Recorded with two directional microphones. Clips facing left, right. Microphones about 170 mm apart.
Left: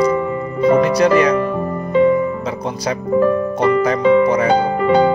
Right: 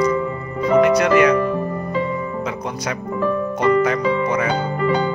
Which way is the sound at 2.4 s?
30° left (ahead or behind).